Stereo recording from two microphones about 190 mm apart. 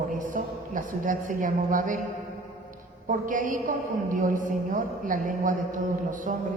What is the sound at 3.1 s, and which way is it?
A woman's voice, 45° right (ahead or behind).